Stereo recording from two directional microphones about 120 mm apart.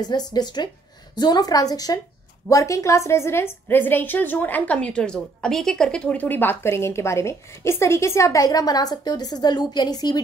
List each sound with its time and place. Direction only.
0.0 s a woman's voice: 35° left (ahead or behind)